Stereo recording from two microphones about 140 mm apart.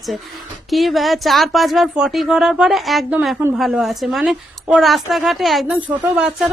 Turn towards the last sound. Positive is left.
turn(degrees=-5)  # may be behind; listen again after turning